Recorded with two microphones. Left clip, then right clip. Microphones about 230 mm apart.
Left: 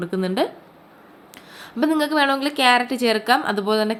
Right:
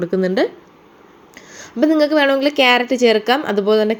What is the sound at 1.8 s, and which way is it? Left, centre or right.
Speech, centre.